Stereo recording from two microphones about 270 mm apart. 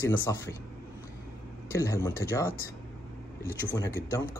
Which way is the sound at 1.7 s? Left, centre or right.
Centre.